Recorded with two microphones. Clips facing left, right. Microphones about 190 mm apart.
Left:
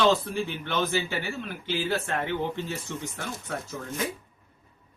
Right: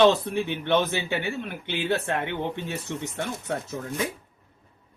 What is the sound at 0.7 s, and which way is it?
Speech, 65° right (ahead or behind).